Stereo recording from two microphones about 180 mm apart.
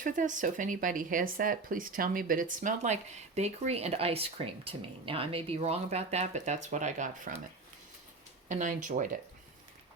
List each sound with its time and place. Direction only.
0.0 s speech: 45° right (ahead or behind)
8.4 s speech: 45° right (ahead or behind)